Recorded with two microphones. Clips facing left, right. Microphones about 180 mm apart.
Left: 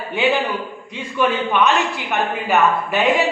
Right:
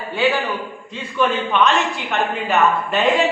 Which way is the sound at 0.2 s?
15° left (ahead or behind).